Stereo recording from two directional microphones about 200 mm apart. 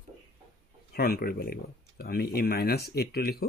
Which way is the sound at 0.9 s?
50° left (ahead or behind).